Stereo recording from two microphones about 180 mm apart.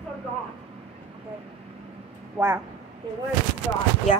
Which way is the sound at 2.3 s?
15° right (ahead or behind).